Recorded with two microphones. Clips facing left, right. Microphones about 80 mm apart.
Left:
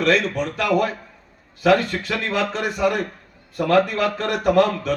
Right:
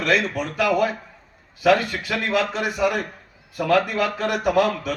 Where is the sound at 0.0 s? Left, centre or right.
Centre.